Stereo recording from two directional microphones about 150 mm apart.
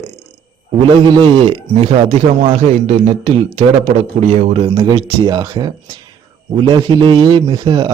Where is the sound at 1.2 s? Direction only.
35° right (ahead or behind).